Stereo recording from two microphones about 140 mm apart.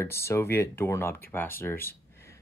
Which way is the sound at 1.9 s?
20° left (ahead or behind).